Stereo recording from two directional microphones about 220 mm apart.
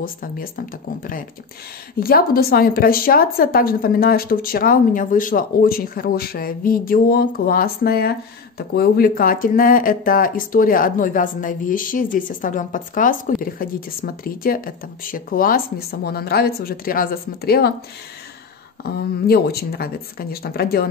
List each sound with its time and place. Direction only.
0.0 s speech: 40° left (ahead or behind)
18.8 s speech: 45° left (ahead or behind)